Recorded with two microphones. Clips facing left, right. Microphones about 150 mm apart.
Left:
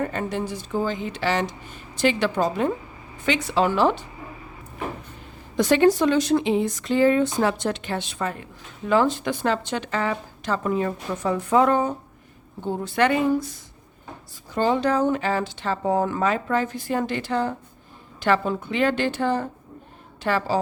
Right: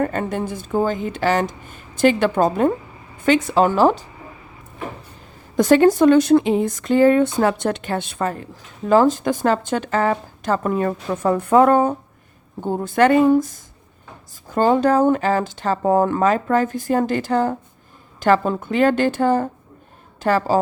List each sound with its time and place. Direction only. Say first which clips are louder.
0.0 s speech: right 4 dB; 50° right (ahead or behind)
5.5 s a woman's voice: right 4 dB; 45° right (ahead or behind)